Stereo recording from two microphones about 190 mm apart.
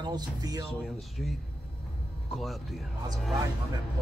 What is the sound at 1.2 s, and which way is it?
A man's voice, 5° left (ahead or behind).